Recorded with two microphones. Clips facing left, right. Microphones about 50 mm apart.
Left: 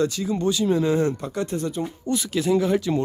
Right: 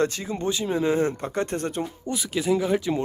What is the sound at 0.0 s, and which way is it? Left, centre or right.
Speech, right.